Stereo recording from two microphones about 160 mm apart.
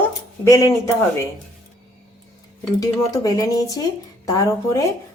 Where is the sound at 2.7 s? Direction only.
20° left (ahead or behind).